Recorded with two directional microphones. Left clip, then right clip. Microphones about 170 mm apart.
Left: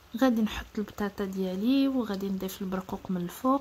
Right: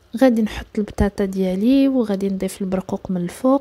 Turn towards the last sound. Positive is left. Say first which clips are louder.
# right 9 dB
turn(degrees=-30)  # may be behind; listen again after turning